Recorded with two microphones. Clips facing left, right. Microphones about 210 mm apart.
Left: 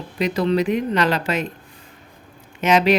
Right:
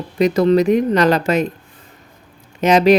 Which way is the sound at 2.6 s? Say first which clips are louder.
Right 5 dB; 40° right (ahead or behind).